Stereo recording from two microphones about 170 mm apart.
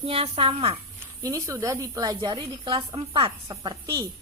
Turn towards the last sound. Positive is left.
turn(degrees=-25)  # may be behind; listen again after turning